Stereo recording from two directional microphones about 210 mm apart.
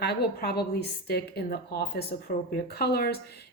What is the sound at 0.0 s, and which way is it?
A woman's voice, 50° left (ahead or behind).